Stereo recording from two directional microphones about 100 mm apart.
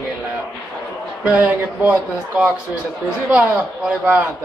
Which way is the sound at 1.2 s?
15° right (ahead or behind).